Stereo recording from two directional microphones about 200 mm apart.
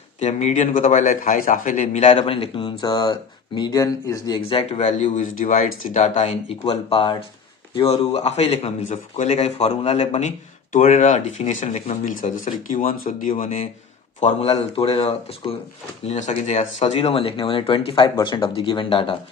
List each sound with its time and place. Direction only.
0.2 s a man's voice: 35° left (ahead or behind)
6.7 s a man's voice: 25° left (ahead or behind)